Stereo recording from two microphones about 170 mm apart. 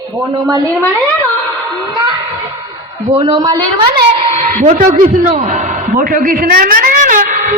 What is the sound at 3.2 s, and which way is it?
Speech, 25° right (ahead or behind).